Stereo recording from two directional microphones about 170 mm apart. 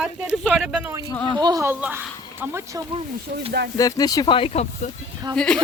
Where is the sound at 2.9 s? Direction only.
35° right (ahead or behind).